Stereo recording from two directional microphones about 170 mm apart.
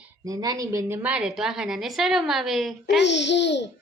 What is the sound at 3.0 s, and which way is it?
Speech, 90° left.